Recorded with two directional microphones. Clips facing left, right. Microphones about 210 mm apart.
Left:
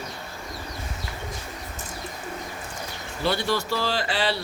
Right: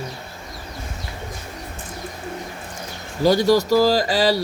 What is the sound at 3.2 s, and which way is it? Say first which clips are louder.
Speech: right 9 dB; 40° right (ahead or behind).